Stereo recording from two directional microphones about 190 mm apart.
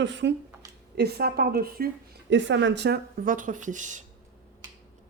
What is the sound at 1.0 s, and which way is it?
Speech, 55° right (ahead or behind).